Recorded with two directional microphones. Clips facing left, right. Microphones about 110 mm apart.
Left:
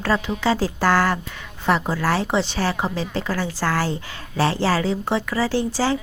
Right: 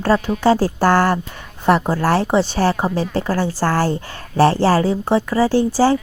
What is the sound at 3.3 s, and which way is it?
Speech, 35° right (ahead or behind).